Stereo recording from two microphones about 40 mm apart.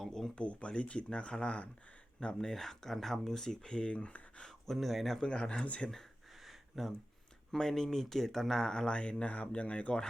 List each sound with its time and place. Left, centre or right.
0.0 s a sound: centre
0.3 s speech: left
2.2 s speech: centre; by 4.4 s left
4.4 s speech: centre
5.2 s speech: left
6.4 s a sound: centre
7.5 s speech: centre
8.9 s speech: left